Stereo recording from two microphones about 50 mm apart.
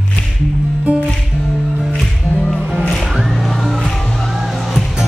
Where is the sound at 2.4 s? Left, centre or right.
Centre.